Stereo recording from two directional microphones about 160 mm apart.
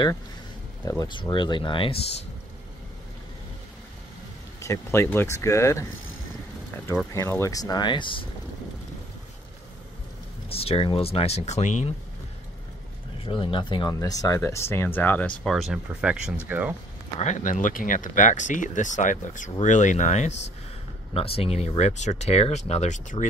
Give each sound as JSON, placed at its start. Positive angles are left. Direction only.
{"t": 0.8, "sound": "speech", "side_deg": 25}
{"t": 4.6, "sound": "speech", "side_deg": 15}
{"t": 7.2, "sound": "speech", "side_deg": 15}
{"t": 10.5, "sound": "speech", "side_deg": 35}
{"t": 13.2, "sound": "speech", "side_deg": 35}
{"t": 17.2, "sound": "speech", "side_deg": 50}